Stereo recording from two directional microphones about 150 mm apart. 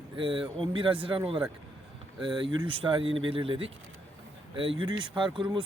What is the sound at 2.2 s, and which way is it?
Speech, 30° right (ahead or behind).